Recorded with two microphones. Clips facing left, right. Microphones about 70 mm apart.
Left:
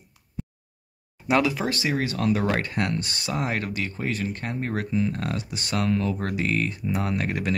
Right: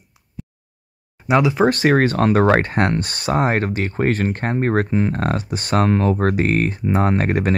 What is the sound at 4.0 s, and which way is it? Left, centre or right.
Speech, right.